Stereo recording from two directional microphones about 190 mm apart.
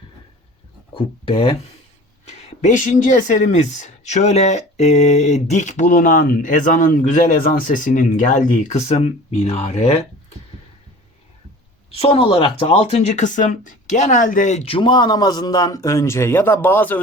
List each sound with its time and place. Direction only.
0.9 s speech: 30° left (ahead or behind)
11.9 s speech: 30° left (ahead or behind); by 17.0 s 10° left (ahead or behind)